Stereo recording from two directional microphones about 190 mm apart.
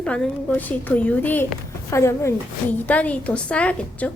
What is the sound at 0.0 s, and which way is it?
A woman's voice, 5° left (ahead or behind).